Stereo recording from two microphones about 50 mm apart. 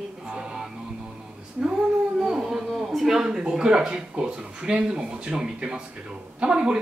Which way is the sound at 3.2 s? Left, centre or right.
Centre.